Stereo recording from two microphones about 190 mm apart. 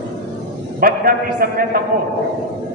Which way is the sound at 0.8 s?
50° right (ahead or behind).